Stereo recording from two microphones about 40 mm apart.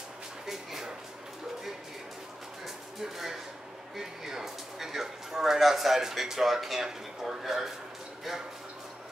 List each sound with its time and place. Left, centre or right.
0.5 s dog: centre
2.6 s a sound: centre
3.9 s speech: centre